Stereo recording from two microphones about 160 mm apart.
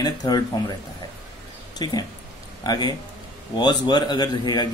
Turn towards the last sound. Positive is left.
turn(degrees=25)  # may be behind; listen again after turning